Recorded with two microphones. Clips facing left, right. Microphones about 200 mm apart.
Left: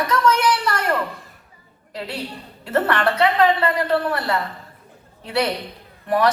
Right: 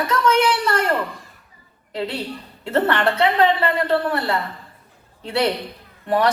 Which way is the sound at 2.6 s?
25° right (ahead or behind).